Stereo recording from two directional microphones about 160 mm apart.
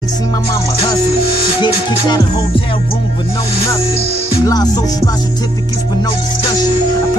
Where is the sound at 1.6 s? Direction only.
25° left (ahead or behind).